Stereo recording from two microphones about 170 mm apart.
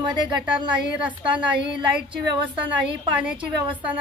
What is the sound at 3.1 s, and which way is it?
Speech, 10° right (ahead or behind).